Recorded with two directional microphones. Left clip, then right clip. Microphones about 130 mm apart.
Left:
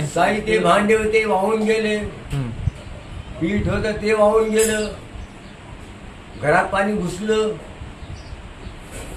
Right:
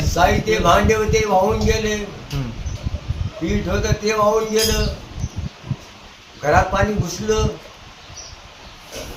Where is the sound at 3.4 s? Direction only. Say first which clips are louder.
Even; centre (ahead or behind).